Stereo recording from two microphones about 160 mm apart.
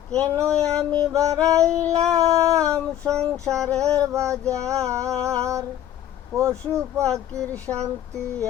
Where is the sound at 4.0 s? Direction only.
20° right (ahead or behind).